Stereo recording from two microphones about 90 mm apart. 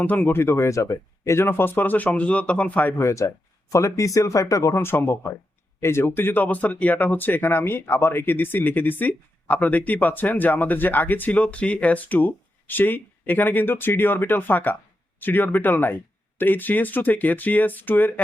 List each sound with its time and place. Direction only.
0.0 s speech: 20° left (ahead or behind)
3.0 s speech: 35° left (ahead or behind)